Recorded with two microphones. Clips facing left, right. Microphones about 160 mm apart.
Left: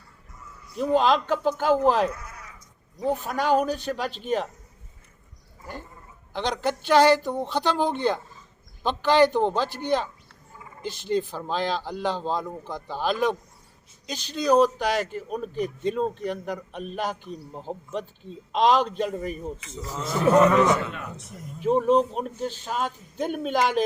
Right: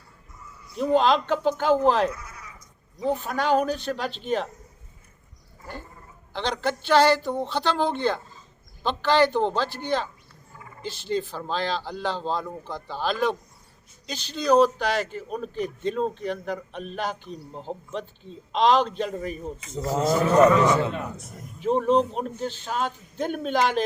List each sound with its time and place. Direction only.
0.8 s a man's voice: centre (ahead or behind)
6.3 s a man's voice: 10° left (ahead or behind)
19.8 s speech: 45° right (ahead or behind)
20.8 s a man's voice: 35° right (ahead or behind)
21.6 s a man's voice: 5° left (ahead or behind)